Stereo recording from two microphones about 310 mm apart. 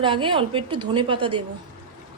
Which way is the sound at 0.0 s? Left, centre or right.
Centre.